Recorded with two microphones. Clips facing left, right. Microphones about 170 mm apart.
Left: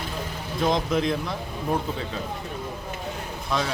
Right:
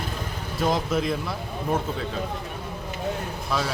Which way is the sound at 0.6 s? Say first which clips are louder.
Left 1 dB; 5° right (ahead or behind).